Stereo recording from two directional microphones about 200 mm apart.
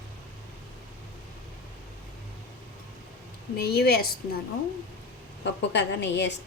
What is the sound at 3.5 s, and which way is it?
Speech, 50° left (ahead or behind).